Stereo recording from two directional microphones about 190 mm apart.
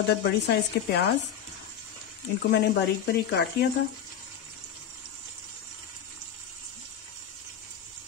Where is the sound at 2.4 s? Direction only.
60° left (ahead or behind).